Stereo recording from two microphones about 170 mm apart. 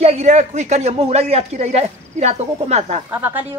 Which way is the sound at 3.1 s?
10° right (ahead or behind).